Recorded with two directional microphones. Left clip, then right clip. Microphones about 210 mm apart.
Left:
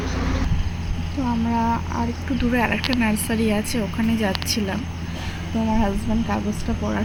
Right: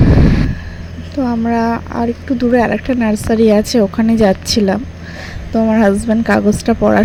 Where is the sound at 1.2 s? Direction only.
35° right (ahead or behind).